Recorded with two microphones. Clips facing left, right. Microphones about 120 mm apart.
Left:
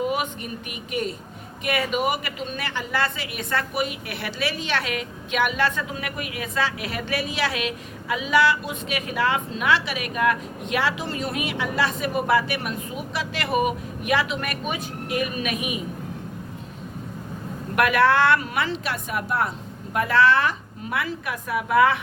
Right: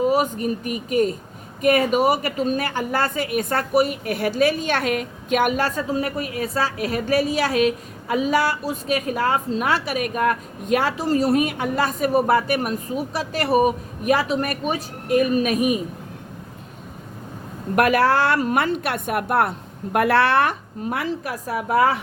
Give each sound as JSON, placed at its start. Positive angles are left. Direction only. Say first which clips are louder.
{"t": 0.0, "sound": "a woman's voice", "louder": "right 6 dB", "side_deg": -40}
{"t": 17.7, "sound": "a woman's voice", "louder": "right 1 dB", "side_deg": -40}
{"t": 20.9, "sound": "a woman's voice", "louder": "right 1 dB", "side_deg": -40}